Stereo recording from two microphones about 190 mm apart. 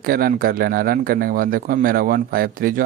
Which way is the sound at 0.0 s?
50° right (ahead or behind).